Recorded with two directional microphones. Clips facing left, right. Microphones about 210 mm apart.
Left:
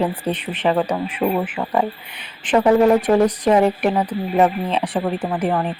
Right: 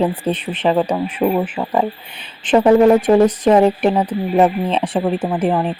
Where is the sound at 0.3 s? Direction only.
25° right (ahead or behind).